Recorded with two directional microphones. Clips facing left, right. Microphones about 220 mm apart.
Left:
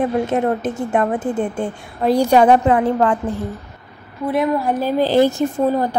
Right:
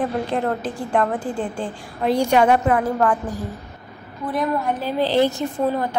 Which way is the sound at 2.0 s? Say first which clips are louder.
Left 4 dB; 35° left (ahead or behind).